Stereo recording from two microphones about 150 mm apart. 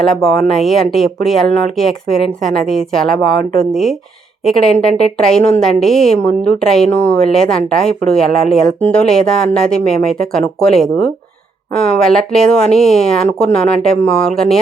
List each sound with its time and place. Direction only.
0.0 s a woman's voice: centre (ahead or behind)